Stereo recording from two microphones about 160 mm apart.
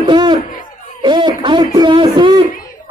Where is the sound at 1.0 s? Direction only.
30° right (ahead or behind).